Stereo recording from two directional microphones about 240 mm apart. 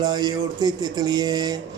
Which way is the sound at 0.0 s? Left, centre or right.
Centre.